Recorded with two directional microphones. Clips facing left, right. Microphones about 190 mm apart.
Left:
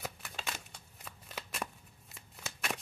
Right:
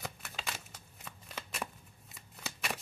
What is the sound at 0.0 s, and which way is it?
Shuffling cards, centre (ahead or behind).